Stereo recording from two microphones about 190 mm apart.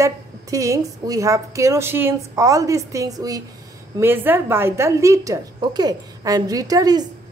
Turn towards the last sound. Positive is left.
turn(degrees=-20)  # may be behind; listen again after turning